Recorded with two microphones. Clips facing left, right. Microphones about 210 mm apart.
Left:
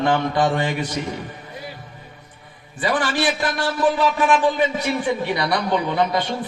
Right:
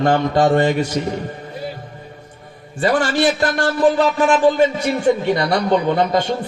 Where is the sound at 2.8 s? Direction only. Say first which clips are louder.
Right 5 dB; 45° right (ahead or behind).